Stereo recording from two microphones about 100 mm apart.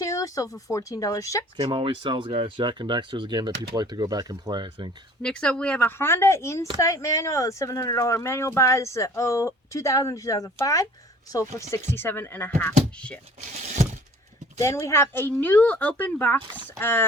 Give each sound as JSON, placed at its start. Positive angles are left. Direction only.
{"t": 0.0, "sound": "speech", "side_deg": 35}
{"t": 1.7, "sound": "speech", "side_deg": -55}
{"t": 5.2, "sound": "speech", "side_deg": 10}
{"t": 6.0, "sound": "speech", "side_deg": 25}
{"t": 14.6, "sound": "speech", "side_deg": 30}